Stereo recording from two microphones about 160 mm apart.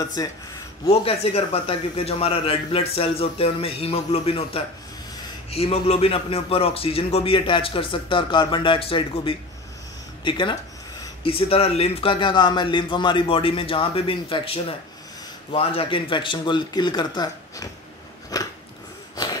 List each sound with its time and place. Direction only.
0.0 s a man's voice: 25° left (ahead or behind)
1.0 s a man's voice: 40° left (ahead or behind)
18.3 s biting: 25° left (ahead or behind)